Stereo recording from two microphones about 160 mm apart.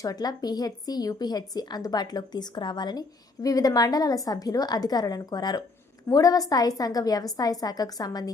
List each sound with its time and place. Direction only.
0.0 s speech: 25° left (ahead or behind)